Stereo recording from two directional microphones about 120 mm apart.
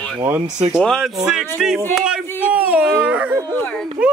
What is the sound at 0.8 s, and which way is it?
Speech, 5° left (ahead or behind).